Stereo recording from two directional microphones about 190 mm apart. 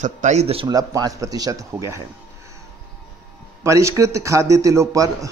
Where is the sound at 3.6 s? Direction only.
15° right (ahead or behind).